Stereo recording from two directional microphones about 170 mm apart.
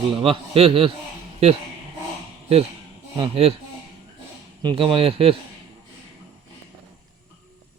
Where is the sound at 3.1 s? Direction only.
30° right (ahead or behind).